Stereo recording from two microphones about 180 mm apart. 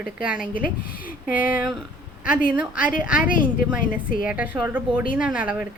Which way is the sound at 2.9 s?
50° left (ahead or behind).